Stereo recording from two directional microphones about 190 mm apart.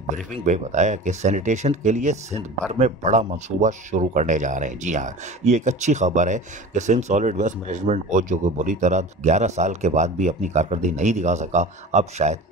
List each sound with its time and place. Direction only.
0.1 s speech: 40° right (ahead or behind)